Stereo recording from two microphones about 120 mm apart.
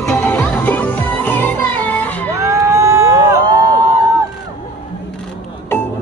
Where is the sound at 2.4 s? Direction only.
25° right (ahead or behind).